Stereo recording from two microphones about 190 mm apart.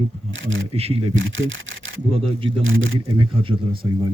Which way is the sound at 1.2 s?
90° right.